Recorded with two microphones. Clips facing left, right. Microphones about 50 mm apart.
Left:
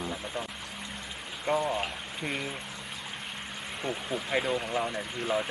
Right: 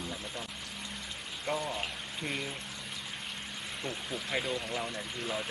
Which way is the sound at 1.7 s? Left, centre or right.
Centre.